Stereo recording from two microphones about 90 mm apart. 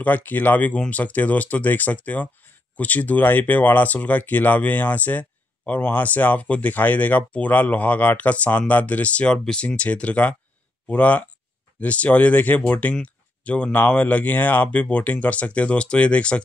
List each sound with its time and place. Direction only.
0.0 s speech: 20° left (ahead or behind)